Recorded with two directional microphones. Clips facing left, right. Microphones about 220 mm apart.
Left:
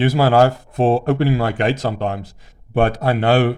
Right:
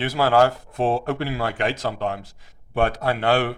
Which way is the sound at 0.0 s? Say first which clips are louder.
Left 4 dB; 15° left (ahead or behind).